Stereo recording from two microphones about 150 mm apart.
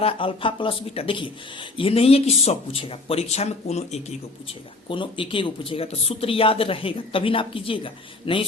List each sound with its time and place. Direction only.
0.0 s speech: 35° left (ahead or behind)
4.9 s speech: 35° left (ahead or behind)